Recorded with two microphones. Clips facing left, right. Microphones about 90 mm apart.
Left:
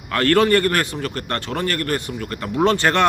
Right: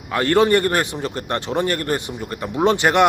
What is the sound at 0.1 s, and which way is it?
Speech, 15° right (ahead or behind).